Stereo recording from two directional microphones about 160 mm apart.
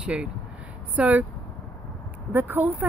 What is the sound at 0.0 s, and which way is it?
Speech, 5° right (ahead or behind).